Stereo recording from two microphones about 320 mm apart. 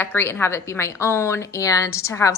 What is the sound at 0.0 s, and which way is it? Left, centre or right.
A woman's voice, centre.